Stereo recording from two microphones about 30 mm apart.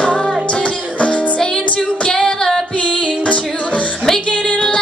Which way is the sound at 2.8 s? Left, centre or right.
Left.